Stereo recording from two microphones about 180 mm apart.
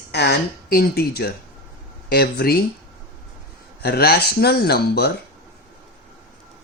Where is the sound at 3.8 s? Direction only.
60° left (ahead or behind).